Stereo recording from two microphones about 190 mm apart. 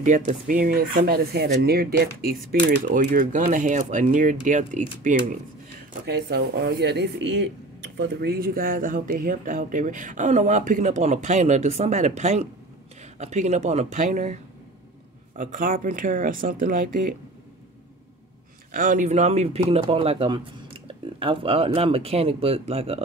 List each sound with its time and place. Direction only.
0.0 s speech: 40° right (ahead or behind)
6.0 s speech: 60° right (ahead or behind)
18.7 s speech: 45° right (ahead or behind)